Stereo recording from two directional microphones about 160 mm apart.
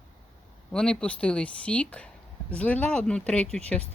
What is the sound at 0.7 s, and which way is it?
Speech, 5° left (ahead or behind).